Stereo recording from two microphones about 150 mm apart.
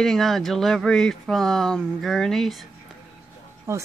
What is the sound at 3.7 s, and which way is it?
Speech, 20° right (ahead or behind).